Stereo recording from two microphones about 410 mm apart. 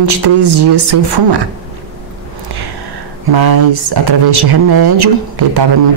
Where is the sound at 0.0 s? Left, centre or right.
Right.